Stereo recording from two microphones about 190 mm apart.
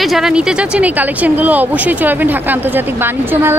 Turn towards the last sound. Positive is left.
turn(degrees=-10)  # may be behind; listen again after turning